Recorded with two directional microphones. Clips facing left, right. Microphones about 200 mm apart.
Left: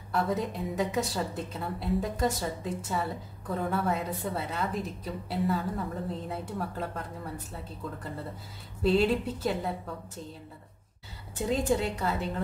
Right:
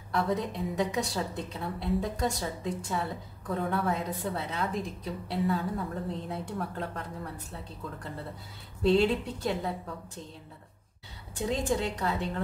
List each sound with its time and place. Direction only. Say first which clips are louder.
0.1 s a woman's voice: even; centre (ahead or behind)
11.3 s a woman's voice: left 2 dB; 5° left (ahead or behind)